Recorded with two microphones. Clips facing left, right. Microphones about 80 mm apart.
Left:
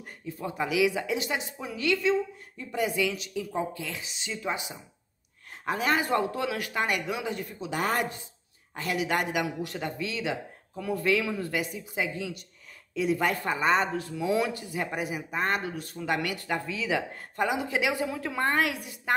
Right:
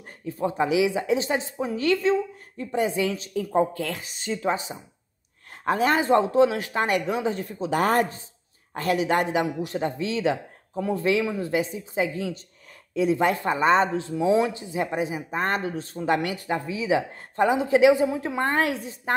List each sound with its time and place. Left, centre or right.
0.2 s speech: right
0.5 s a woman's voice: right
2.7 s speech: right
6.8 s a woman's voice: right
7.7 s speech: right
12.1 s a woman's voice: right
16.3 s speech: right
17.1 s a woman's voice: right